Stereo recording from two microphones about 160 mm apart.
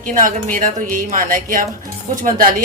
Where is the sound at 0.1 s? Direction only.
55° right (ahead or behind).